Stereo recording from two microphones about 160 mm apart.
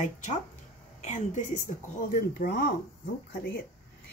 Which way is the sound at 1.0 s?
50° left (ahead or behind).